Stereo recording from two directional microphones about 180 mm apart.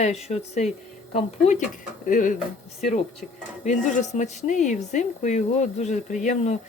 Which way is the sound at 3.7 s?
40° left (ahead or behind).